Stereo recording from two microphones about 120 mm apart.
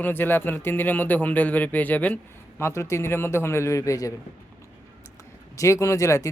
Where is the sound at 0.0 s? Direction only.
15° left (ahead or behind).